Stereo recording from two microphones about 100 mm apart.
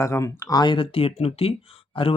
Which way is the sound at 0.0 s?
30° left (ahead or behind).